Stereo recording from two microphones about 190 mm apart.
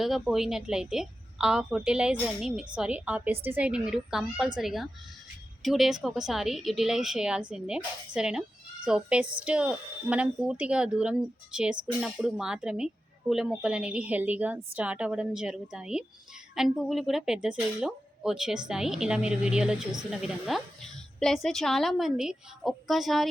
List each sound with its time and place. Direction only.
0.0 s a woman's voice: centre (ahead or behind)